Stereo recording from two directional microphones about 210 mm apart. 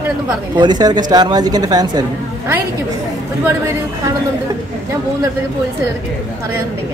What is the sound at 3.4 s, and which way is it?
Speech, 15° right (ahead or behind).